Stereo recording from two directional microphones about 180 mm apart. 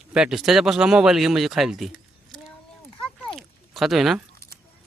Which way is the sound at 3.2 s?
Centre (ahead or behind).